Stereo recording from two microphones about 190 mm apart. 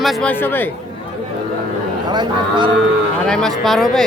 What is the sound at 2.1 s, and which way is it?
Speech, 25° right (ahead or behind).